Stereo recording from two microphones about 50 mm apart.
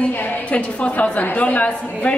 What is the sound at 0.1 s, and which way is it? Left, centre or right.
A woman's voice, left.